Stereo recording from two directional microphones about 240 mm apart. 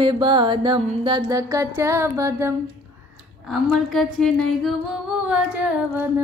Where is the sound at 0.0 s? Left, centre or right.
Centre.